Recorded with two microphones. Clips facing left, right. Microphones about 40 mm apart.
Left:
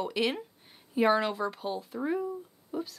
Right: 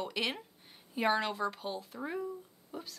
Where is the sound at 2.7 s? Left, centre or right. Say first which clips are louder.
Left 9 dB; centre.